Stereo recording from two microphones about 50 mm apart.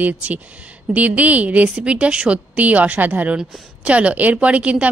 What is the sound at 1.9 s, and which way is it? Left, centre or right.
Speech, centre.